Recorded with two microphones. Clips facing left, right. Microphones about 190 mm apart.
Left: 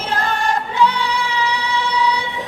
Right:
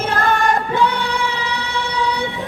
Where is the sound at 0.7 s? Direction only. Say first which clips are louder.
Even; 50° right (ahead or behind).